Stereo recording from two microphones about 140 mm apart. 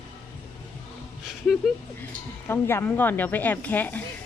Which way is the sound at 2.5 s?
15° left (ahead or behind).